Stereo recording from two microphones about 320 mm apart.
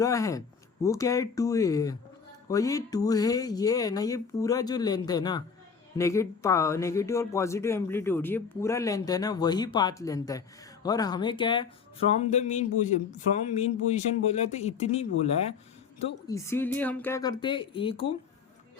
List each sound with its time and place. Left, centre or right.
0.0 s speech: centre